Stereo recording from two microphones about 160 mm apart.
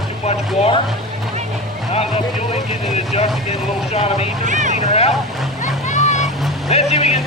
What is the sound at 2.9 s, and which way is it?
Speech, 45° left (ahead or behind).